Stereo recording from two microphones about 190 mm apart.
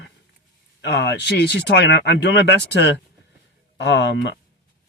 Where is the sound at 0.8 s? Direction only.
60° left (ahead or behind).